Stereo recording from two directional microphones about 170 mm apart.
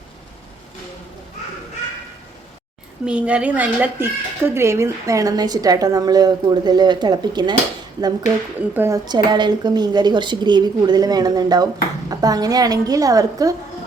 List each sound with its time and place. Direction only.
3.1 s speech: 5° right (ahead or behind); by 7.5 s 25° right (ahead or behind)
8.7 s speech: 15° right (ahead or behind)
9.0 s speech: 25° right (ahead or behind)